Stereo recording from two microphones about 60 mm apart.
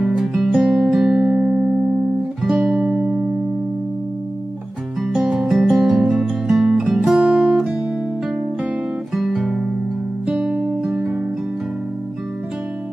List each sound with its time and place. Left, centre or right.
0.0 s music: centre
5.0 s music: centre
7.2 s music: right
9.1 s guitar: centre
10.6 s music: centre